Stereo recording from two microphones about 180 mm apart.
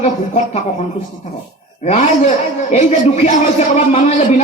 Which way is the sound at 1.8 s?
35° left (ahead or behind).